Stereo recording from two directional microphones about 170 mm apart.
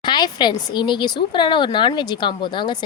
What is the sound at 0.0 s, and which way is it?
A woman's voice, 25° left (ahead or behind).